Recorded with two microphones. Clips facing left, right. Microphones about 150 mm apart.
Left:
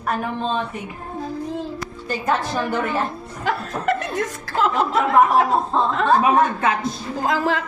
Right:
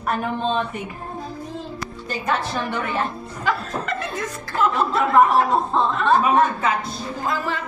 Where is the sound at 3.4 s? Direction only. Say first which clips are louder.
Left 2 dB; 60° left (ahead or behind).